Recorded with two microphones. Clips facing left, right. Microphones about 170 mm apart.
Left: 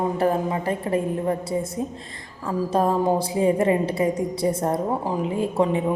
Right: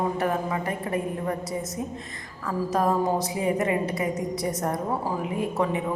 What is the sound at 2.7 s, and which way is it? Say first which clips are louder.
A woman's voice: left 3 dB; 30° left (ahead or behind).